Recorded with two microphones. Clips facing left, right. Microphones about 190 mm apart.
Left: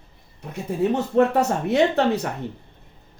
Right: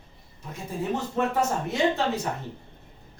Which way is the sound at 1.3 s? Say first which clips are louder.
Left 6 dB; 65° left (ahead or behind).